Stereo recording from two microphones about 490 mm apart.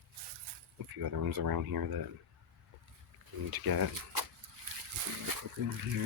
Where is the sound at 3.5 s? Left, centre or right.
Right.